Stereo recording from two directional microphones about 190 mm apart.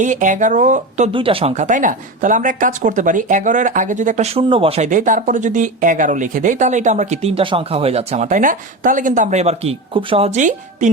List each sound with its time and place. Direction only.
0.0 s speech: 40° right (ahead or behind)
1.1 s speech: 30° right (ahead or behind)